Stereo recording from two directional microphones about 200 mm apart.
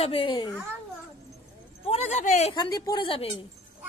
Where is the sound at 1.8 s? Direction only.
35° left (ahead or behind).